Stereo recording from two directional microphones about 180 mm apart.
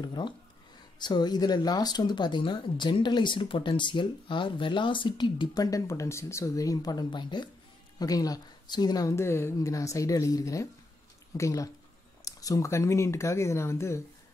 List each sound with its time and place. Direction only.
0.0 s speech: 25° left (ahead or behind)